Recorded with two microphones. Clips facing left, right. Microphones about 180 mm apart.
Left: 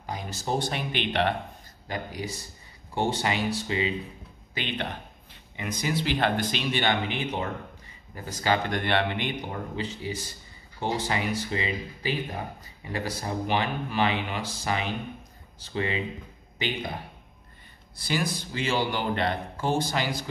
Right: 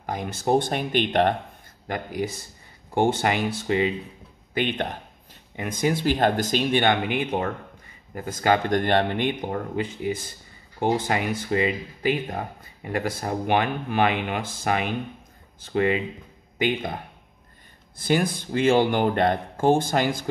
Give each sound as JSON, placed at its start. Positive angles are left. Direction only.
{"t": 0.0, "sound": "speech", "side_deg": -55}